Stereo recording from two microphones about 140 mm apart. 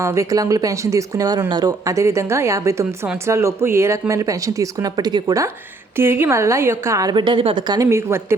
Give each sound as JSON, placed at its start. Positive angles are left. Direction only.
{"t": 0.0, "sound": "speech", "side_deg": -20}
{"t": 7.9, "sound": "speech", "side_deg": -20}